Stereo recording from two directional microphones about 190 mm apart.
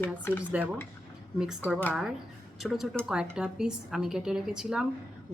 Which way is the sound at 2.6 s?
Centre (ahead or behind).